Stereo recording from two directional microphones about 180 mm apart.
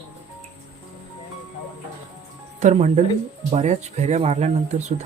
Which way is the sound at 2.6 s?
40° right (ahead or behind).